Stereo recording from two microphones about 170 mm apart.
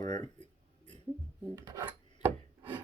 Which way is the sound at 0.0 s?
25° left (ahead or behind).